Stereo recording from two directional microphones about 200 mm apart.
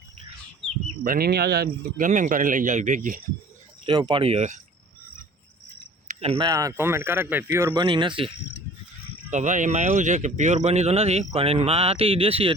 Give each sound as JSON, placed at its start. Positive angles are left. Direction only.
{"t": 1.0, "sound": "a man's voice", "side_deg": -45}
{"t": 3.8, "sound": "speech", "side_deg": -20}
{"t": 6.1, "sound": "speech", "side_deg": -30}
{"t": 9.3, "sound": "a man's voice", "side_deg": -40}